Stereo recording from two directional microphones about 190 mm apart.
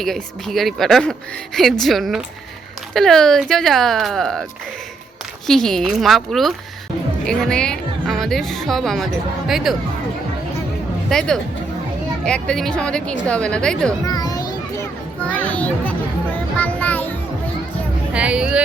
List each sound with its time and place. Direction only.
0.0 s a woman's voice: centre (ahead or behind)
5.5 s a woman's voice: centre (ahead or behind)
11.1 s a woman's voice: 5° left (ahead or behind)
14.0 s children playing: 20° left (ahead or behind)
15.3 s a child's voice: 5° left (ahead or behind)
16.6 s a sound: 10° left (ahead or behind)
18.1 s a woman's voice: 5° right (ahead or behind)